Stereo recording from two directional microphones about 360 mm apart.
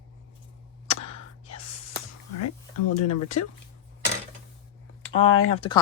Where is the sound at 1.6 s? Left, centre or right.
Centre.